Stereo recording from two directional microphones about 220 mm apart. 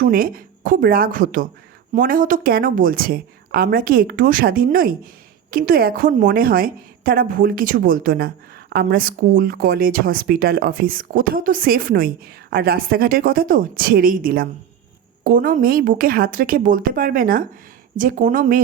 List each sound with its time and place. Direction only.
0.0 s a woman's voice: 40° right (ahead or behind)